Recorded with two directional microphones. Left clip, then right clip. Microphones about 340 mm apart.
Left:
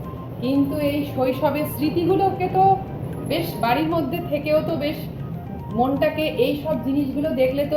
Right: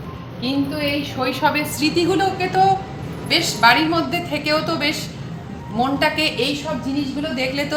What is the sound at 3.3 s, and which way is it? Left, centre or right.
Speech, right.